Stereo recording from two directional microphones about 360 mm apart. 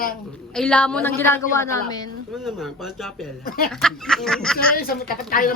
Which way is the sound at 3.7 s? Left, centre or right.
Centre.